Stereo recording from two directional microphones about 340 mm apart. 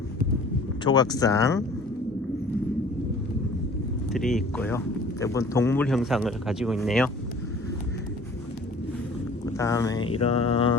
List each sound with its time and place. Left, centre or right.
0.9 s speech: centre
4.1 s speech: centre
9.5 s speech: centre